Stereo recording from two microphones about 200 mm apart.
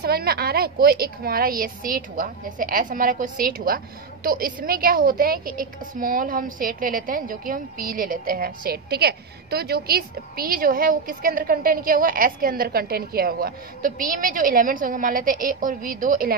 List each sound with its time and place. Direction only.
0.0 s a woman's voice: 50° right (ahead or behind)